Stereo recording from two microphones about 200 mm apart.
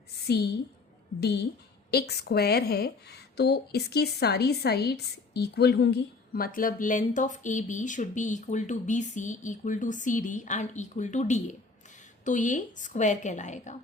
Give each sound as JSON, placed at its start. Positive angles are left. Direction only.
{"t": 0.3, "sound": "a woman's voice", "side_deg": 55}